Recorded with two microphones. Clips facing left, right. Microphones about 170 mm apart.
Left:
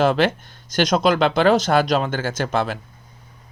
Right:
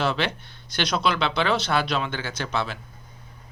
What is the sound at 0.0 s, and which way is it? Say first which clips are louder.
Speech: left 8 dB; 50° left (ahead or behind).